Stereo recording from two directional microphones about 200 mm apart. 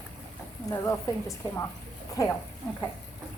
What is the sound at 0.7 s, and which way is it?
Speech, 15° left (ahead or behind).